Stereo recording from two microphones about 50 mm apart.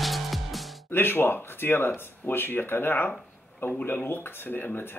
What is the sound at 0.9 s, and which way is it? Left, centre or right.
Speech, left.